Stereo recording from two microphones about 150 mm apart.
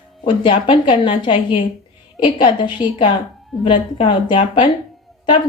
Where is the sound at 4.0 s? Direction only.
35° left (ahead or behind).